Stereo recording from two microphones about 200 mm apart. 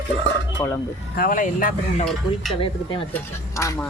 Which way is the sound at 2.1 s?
Centre (ahead or behind).